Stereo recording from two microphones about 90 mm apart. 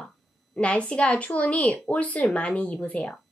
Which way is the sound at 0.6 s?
15° left (ahead or behind).